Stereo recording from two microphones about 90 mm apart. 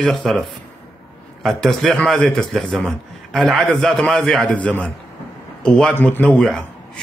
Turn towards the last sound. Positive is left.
turn(degrees=5)  # may be behind; listen again after turning